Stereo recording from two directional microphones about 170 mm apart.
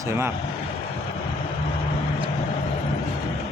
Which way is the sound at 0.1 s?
15° right (ahead or behind).